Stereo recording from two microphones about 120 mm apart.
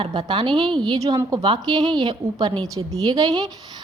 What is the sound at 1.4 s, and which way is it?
A woman's voice, 40° right (ahead or behind).